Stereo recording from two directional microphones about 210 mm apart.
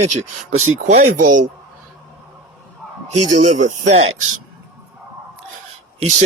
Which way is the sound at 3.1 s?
35° right (ahead or behind).